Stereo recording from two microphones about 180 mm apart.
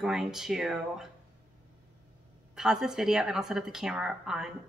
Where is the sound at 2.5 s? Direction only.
5° right (ahead or behind).